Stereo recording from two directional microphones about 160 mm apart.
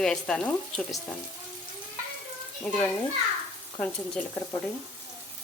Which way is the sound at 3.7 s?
5° left (ahead or behind).